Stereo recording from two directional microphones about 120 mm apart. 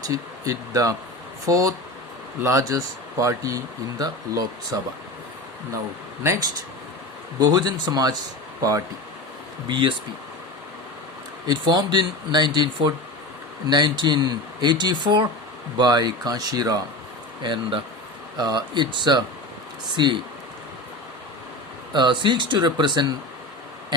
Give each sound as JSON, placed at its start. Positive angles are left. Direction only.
{"t": 0.0, "sound": "speech", "side_deg": -30}
{"t": 7.3, "sound": "speech", "side_deg": -35}
{"t": 9.6, "sound": "speech", "side_deg": -40}
{"t": 11.4, "sound": "speech", "side_deg": -35}
{"t": 17.4, "sound": "speech", "side_deg": -40}
{"t": 21.9, "sound": "speech", "side_deg": -40}